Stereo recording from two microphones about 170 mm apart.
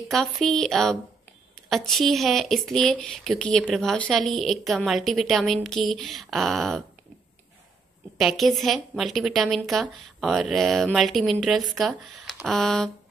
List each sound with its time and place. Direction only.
0.1 s speech: centre (ahead or behind)
8.2 s speech: centre (ahead or behind)